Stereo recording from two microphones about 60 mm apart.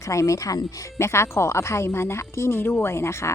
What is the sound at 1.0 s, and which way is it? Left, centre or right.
Speech, left.